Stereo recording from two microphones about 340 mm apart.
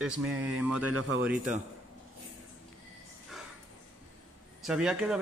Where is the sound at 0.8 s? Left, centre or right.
Right.